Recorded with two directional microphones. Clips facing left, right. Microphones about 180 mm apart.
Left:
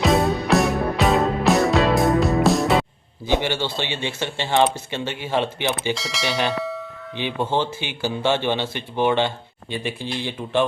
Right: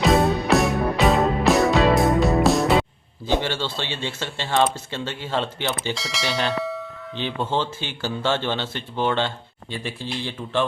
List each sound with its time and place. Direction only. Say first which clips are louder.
0.0 s music: even; centre (ahead or behind)
3.3 s speech: left 2 dB; 15° left (ahead or behind)
5.9 s speech: left 2 dB; centre (ahead or behind)
7.2 s speech: left 2 dB; 15° left (ahead or behind)